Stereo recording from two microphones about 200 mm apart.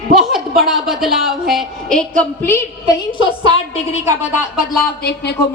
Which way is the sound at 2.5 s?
20° left (ahead or behind).